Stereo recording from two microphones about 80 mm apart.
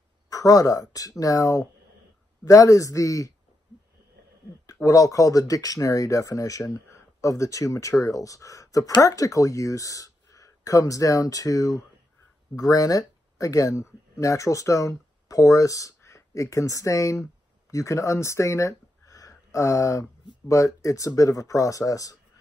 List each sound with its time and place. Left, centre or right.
0.3 s speech: left
4.8 s speech: left